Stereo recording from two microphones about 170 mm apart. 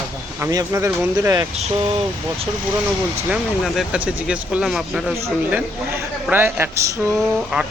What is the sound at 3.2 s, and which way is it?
A man's voice, 5° right (ahead or behind).